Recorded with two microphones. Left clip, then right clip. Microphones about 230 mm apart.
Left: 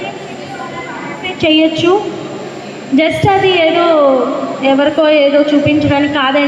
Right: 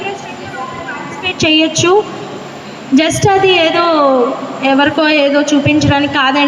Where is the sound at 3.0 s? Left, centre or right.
Right.